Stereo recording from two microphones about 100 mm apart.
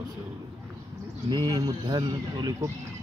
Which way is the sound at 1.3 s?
40° right (ahead or behind).